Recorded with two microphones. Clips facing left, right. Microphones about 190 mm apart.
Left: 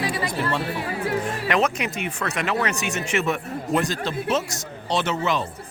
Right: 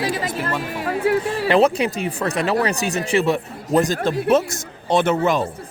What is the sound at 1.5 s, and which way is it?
Speech, 30° right (ahead or behind).